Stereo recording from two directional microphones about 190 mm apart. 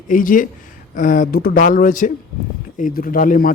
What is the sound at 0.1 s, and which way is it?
Speech, 45° left (ahead or behind).